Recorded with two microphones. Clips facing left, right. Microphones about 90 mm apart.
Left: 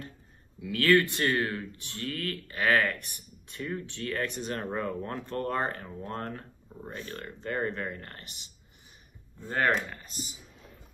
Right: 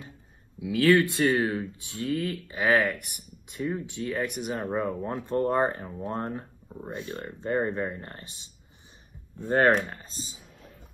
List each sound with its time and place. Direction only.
0.6 s speech: 15° right (ahead or behind)
9.8 s speech: 25° right (ahead or behind)